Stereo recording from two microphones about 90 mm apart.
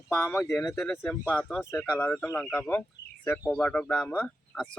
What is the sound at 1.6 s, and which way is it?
Speech, 30° left (ahead or behind).